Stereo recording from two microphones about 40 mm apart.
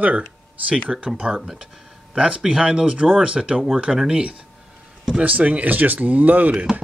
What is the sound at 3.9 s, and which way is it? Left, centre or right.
Speech, centre.